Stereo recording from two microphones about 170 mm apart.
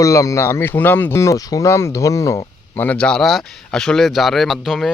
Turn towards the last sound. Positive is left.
turn(degrees=0)  # may be behind; listen again after turning